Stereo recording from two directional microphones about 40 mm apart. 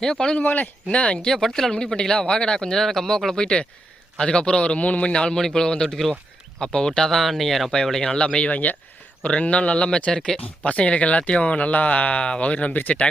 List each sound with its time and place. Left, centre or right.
0.0 s speech: centre
0.4 s speech: left
0.9 s a man's voice: left
1.3 s speech: centre
1.7 s a man's voice: centre
2.7 s speech: centre
3.4 s a man's voice: left
8.2 s a man's voice: left
10.4 s speech: left